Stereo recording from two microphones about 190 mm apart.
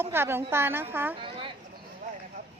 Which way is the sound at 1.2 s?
25° right (ahead or behind).